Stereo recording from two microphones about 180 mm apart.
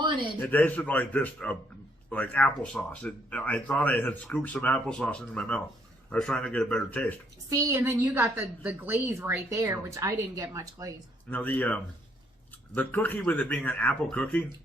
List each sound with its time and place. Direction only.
0.3 s speech: 10° left (ahead or behind)
7.5 s a woman's voice: 15° right (ahead or behind)
11.3 s speech: 10° left (ahead or behind)